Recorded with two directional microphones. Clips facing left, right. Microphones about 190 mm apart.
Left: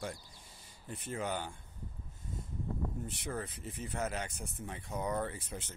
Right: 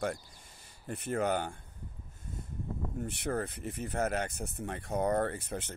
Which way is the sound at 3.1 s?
60° right (ahead or behind).